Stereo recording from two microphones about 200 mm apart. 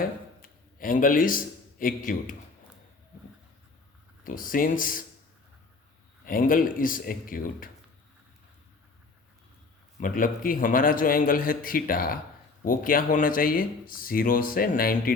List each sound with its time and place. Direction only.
0.0 s a sound: 45° left (ahead or behind)
4.2 s speech: 45° left (ahead or behind)
6.2 s speech: 45° left (ahead or behind)
10.0 s speech: 45° left (ahead or behind)